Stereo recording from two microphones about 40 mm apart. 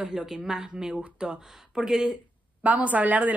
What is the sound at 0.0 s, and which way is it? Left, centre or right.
Speech, centre.